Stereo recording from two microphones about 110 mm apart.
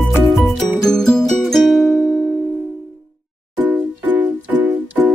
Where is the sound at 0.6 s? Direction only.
5° left (ahead or behind).